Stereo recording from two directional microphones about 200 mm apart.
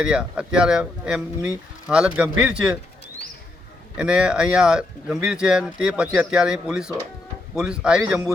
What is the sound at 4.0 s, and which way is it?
Speech, 5° right (ahead or behind).